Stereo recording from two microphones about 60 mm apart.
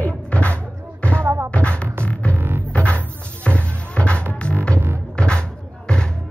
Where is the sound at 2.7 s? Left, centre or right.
Left.